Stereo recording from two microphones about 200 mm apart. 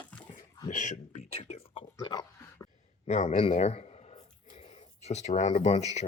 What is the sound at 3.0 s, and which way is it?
Speech, 35° left (ahead or behind).